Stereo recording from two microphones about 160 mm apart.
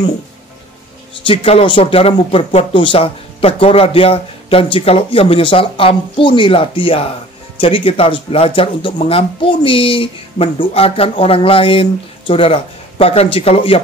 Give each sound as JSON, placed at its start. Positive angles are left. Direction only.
{"t": 1.2, "sound": "speech", "side_deg": 35}